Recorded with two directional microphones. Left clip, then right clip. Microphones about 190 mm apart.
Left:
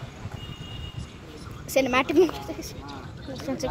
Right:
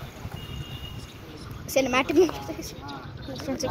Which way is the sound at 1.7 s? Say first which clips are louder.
Left 1 dB; 10° left (ahead or behind).